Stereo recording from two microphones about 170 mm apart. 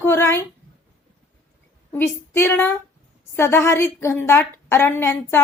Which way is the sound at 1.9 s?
15° left (ahead or behind).